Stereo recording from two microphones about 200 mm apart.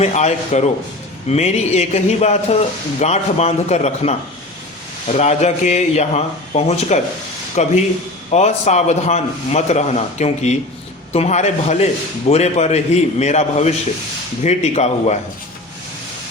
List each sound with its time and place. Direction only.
0.0 s a man's voice: 35° left (ahead or behind)